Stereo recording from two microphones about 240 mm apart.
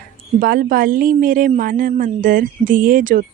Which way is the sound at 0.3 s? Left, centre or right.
Right.